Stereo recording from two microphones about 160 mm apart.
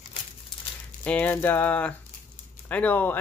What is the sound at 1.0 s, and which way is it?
Speech, 10° left (ahead or behind).